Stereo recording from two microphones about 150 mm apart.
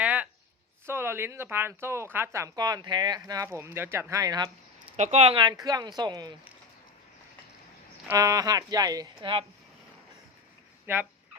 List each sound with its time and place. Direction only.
0.0 s a sound: 10° right (ahead or behind)
0.9 s speech: 15° right (ahead or behind)
4.9 s speech: 50° right (ahead or behind); by 6.3 s 25° right (ahead or behind)
8.1 s speech: 20° right (ahead or behind)
10.9 s speech: 15° right (ahead or behind)